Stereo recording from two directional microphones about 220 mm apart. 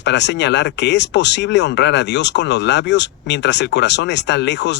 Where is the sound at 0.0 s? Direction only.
50° left (ahead or behind).